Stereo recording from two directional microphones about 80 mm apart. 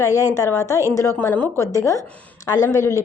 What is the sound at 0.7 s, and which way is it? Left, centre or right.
Speech, right.